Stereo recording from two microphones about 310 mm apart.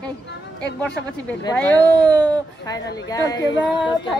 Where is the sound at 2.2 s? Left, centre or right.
Centre.